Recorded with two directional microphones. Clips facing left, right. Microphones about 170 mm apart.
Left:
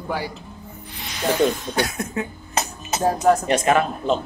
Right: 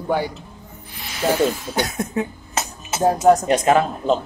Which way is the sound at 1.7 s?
15° right (ahead or behind).